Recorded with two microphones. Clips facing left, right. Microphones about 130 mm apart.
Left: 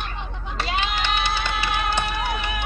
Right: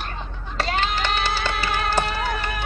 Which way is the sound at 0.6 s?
45° right (ahead or behind).